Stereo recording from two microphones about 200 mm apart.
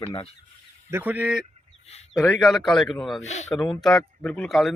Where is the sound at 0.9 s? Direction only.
10° right (ahead or behind).